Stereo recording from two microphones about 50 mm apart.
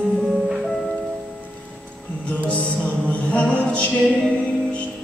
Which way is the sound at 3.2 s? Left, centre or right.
Left.